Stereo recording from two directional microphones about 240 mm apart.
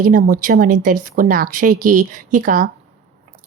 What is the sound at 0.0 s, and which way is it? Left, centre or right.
A woman's voice, right.